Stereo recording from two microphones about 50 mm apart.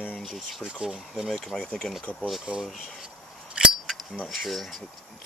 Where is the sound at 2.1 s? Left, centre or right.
Centre.